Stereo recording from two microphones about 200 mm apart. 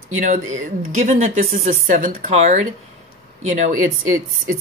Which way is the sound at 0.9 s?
35° right (ahead or behind).